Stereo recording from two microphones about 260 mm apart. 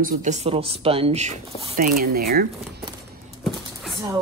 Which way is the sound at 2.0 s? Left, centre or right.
Right.